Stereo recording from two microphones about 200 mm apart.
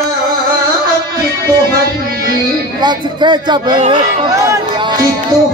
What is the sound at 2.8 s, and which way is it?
Speech, 20° right (ahead or behind).